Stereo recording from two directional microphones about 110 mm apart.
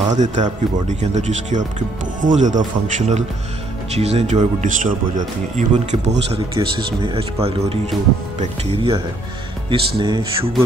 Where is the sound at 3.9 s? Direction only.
75° right (ahead or behind).